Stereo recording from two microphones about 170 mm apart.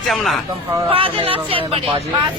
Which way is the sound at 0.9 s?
35° right (ahead or behind).